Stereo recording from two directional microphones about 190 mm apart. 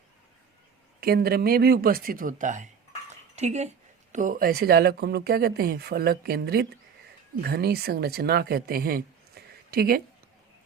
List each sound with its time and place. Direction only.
1.0 s speech: 55° right (ahead or behind)